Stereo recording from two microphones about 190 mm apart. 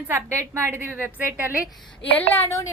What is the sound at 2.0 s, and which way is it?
Speech, 30° left (ahead or behind).